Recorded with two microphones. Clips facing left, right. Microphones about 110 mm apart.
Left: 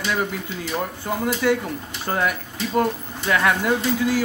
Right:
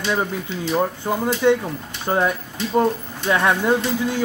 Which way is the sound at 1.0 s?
25° right (ahead or behind).